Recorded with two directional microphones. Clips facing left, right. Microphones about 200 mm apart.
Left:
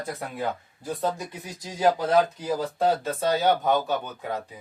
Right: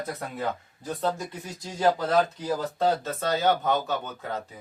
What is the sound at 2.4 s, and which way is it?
Speech, 10° left (ahead or behind).